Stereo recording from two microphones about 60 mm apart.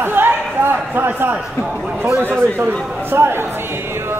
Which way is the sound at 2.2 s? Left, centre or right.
Right.